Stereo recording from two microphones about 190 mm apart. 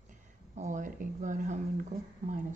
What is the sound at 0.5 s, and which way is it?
Speech, 40° right (ahead or behind).